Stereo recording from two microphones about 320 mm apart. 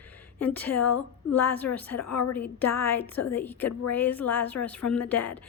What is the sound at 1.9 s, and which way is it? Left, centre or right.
Speech, left.